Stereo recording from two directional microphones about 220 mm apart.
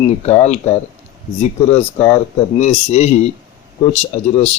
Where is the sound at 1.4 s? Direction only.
30° left (ahead or behind).